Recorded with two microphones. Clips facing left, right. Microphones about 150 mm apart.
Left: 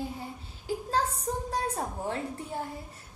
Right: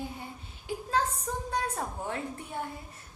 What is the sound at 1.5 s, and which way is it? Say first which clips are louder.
Speech: left 1 dB; 30° left (ahead or behind).